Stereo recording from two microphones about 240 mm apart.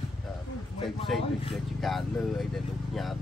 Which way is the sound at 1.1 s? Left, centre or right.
Centre.